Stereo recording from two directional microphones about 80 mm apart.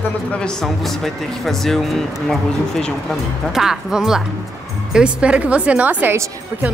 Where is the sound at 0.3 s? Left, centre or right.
Centre.